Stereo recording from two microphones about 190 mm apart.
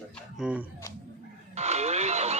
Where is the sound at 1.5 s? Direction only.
35° right (ahead or behind).